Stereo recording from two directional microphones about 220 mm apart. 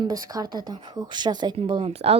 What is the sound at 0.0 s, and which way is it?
Speech, 15° right (ahead or behind).